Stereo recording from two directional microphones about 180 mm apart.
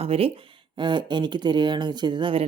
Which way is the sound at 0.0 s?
35° right (ahead or behind).